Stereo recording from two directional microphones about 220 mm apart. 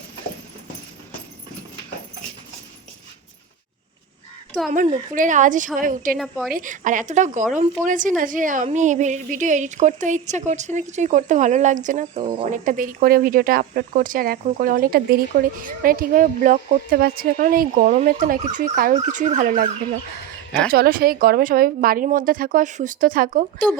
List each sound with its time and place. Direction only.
4.7 s a woman's voice: 35° right (ahead or behind)
6.1 s a woman's voice: centre (ahead or behind)
6.5 s a woman's voice: 35° right (ahead or behind)
20.7 s a woman's voice: 45° right (ahead or behind)